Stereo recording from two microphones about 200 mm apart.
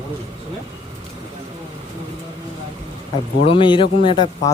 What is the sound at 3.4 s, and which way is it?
Speech, 25° left (ahead or behind).